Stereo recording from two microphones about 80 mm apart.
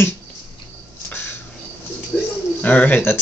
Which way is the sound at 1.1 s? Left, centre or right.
Left.